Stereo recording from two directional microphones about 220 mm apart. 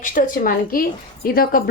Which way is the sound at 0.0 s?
35° left (ahead or behind).